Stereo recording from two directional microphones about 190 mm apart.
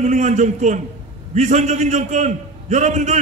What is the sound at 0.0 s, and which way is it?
A man's voice, 40° right (ahead or behind).